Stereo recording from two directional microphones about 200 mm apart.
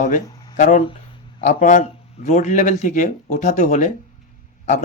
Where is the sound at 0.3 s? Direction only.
20° left (ahead or behind).